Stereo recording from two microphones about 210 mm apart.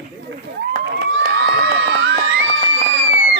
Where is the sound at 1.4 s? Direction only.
60° right (ahead or behind).